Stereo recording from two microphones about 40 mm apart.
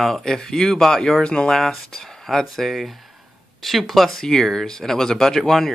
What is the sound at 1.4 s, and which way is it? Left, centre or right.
Speech, centre.